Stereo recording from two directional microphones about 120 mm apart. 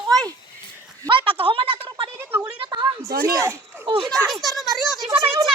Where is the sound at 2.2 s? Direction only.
15° right (ahead or behind).